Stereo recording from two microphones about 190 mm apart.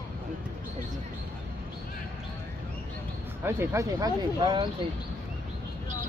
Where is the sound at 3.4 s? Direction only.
15° right (ahead or behind).